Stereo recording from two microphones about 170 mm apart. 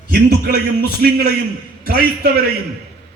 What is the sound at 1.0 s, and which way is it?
Speech, 65° right (ahead or behind).